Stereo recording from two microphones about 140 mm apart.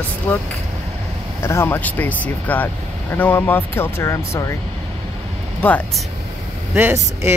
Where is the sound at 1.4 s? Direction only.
20° left (ahead or behind).